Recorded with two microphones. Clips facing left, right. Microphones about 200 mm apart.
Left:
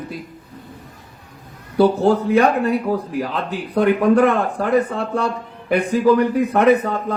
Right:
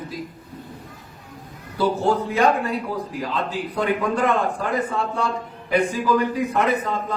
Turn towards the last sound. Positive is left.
turn(degrees=65)  # may be behind; listen again after turning